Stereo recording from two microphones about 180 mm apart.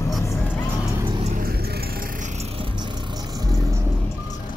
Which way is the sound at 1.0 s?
25° right (ahead or behind).